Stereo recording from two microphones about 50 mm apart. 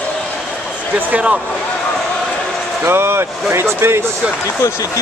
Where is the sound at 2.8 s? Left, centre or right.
Right.